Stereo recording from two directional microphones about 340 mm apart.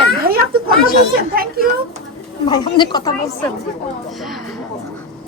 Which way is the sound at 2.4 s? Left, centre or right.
Centre.